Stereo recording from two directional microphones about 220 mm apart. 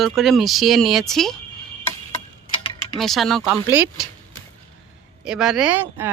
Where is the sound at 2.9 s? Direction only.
Centre (ahead or behind).